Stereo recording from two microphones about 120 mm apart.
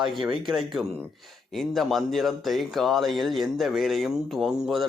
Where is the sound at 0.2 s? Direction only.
40° right (ahead or behind).